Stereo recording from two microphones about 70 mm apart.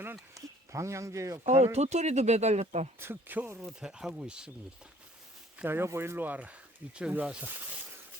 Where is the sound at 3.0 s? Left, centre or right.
Right.